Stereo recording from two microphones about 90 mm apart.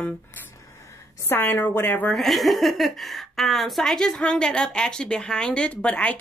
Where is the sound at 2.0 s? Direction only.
Centre (ahead or behind).